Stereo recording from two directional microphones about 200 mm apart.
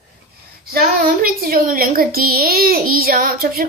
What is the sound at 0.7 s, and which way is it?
A woman's voice, 50° right (ahead or behind).